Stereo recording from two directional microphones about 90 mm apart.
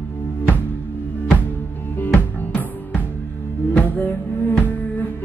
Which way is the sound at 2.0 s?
20° left (ahead or behind).